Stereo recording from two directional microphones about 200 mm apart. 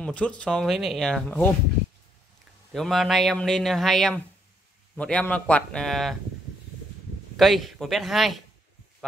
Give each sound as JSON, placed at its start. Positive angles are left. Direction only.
{"t": 0.0, "sound": "speech", "side_deg": 5}
{"t": 2.7, "sound": "speech", "side_deg": 0}
{"t": 7.3, "sound": "speech", "side_deg": 0}